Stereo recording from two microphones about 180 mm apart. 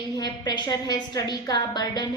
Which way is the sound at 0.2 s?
20° left (ahead or behind).